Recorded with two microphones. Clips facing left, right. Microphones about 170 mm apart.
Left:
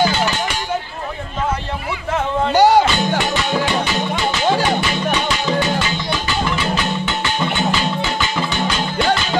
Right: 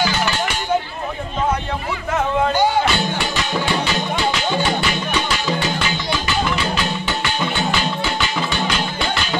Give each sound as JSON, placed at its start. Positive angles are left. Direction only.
{"t": 2.5, "sound": "music", "side_deg": 80}